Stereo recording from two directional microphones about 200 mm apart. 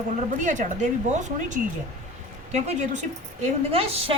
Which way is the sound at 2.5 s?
35° right (ahead or behind).